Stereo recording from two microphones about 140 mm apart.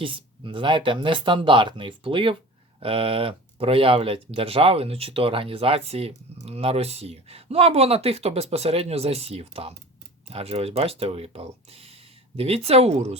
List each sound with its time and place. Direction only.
0.0 s speech: 40° right (ahead or behind)